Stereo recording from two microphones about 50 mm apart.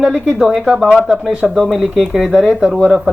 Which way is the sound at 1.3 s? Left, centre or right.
Right.